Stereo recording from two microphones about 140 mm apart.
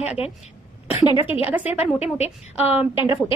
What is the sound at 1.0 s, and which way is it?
Speech, 40° left (ahead or behind).